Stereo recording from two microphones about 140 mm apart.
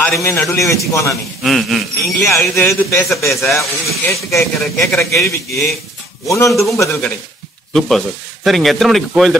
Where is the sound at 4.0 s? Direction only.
20° left (ahead or behind).